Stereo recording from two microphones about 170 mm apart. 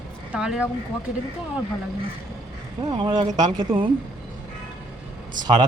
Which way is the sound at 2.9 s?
30° right (ahead or behind).